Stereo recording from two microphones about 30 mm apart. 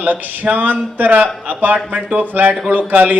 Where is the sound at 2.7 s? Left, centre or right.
Right.